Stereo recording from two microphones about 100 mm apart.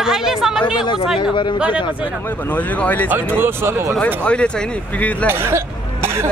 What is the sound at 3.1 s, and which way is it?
Speech, 20° right (ahead or behind).